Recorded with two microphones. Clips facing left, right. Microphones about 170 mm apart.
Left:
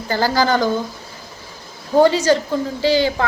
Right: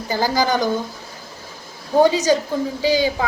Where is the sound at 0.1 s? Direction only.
15° right (ahead or behind).